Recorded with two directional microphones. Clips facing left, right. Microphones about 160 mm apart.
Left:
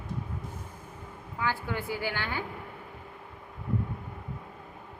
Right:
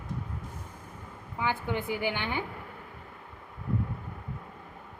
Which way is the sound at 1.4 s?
20° right (ahead or behind).